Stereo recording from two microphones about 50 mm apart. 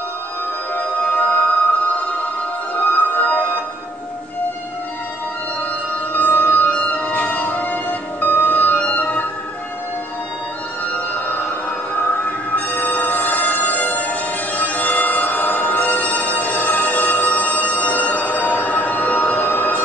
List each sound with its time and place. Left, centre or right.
0.7 s music: left
6.1 s music: left
10.9 s a sound: left
11.9 s music: left